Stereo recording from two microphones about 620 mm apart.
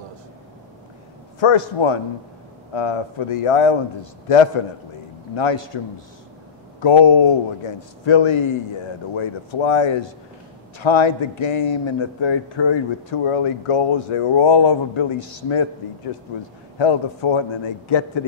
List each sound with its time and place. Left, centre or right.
1.4 s speech: left
5.3 s a man's voice: left
6.8 s speech: left
16.7 s speech: left